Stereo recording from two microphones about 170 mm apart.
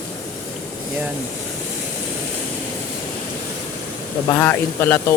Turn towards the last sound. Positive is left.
turn(degrees=15)  # may be behind; listen again after turning